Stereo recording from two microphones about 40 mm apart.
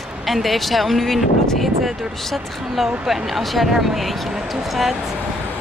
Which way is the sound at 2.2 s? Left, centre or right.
Centre.